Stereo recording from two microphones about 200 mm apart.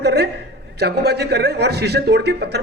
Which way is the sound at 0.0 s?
55° right (ahead or behind).